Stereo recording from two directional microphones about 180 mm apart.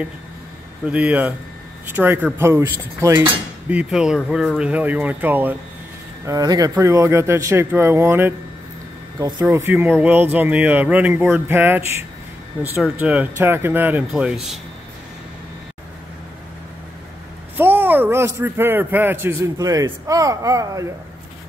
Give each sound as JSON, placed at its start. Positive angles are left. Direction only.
{"t": 0.8, "sound": "a man's voice", "side_deg": -5}
{"t": 17.6, "sound": "a man's voice", "side_deg": -10}